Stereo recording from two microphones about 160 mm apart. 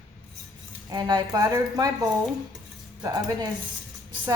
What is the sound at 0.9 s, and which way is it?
A woman's voice, 25° right (ahead or behind).